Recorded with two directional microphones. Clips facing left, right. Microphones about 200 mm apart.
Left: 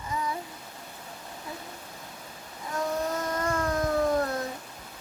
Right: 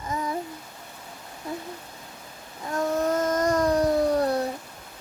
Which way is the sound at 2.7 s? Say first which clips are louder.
Right 5 dB; 50° right (ahead or behind).